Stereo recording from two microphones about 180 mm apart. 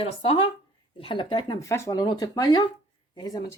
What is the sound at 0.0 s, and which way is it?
Speech, 30° left (ahead or behind).